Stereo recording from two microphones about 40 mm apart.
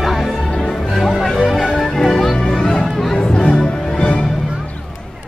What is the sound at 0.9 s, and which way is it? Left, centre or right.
Music, centre.